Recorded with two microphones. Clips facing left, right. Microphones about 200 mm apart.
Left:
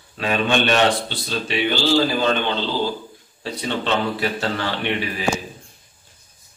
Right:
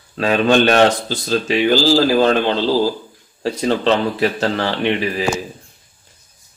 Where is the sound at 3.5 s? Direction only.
40° right (ahead or behind).